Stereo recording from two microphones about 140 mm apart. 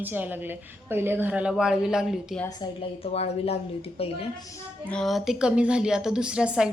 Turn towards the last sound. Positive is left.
turn(degrees=-5)  # may be behind; listen again after turning